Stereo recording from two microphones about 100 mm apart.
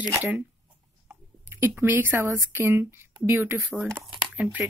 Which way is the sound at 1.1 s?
25° right (ahead or behind).